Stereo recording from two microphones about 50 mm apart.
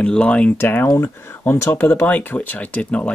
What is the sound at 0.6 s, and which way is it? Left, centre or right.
Speech, left.